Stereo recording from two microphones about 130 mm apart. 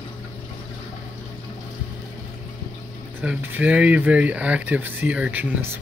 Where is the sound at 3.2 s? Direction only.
10° right (ahead or behind).